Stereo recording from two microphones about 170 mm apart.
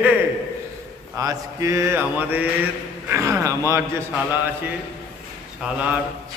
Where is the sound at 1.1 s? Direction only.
20° right (ahead or behind).